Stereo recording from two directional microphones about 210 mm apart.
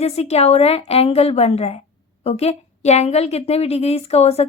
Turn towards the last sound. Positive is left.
turn(degrees=30)  # may be behind; listen again after turning